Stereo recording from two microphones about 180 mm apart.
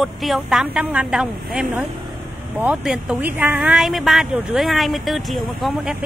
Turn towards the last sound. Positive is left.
turn(degrees=0)  # may be behind; listen again after turning